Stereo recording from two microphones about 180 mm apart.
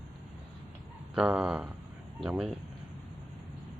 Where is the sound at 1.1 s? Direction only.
5° right (ahead or behind).